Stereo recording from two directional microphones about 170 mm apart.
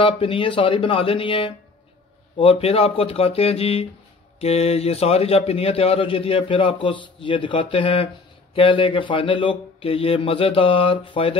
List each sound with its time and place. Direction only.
0.0 s a man's voice: 30° left (ahead or behind)